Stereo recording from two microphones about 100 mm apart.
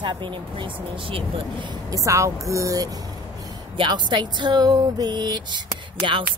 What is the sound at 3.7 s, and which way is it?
Speech, 50° right (ahead or behind).